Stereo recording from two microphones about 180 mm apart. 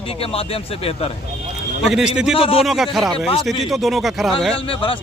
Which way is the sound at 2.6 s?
Centre (ahead or behind).